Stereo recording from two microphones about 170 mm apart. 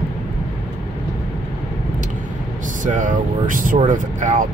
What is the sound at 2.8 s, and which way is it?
Speech, 50° right (ahead or behind).